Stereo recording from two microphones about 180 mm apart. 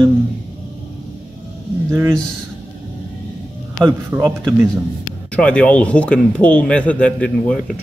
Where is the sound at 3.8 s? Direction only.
15° right (ahead or behind).